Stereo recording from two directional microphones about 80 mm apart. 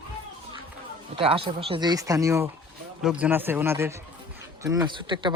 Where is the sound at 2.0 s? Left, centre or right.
Right.